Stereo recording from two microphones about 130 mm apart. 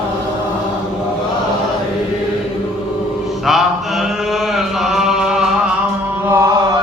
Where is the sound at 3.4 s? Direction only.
Centre (ahead or behind).